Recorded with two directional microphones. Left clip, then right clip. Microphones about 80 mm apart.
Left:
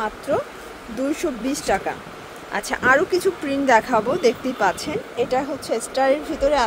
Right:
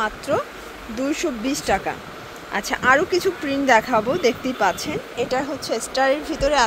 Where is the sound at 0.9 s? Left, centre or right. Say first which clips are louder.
Even; centre.